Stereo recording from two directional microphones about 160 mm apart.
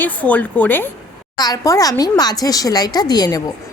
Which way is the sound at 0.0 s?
10° left (ahead or behind).